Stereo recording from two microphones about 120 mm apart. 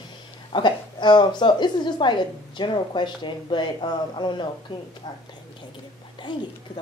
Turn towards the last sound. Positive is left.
turn(degrees=40)  # may be behind; listen again after turning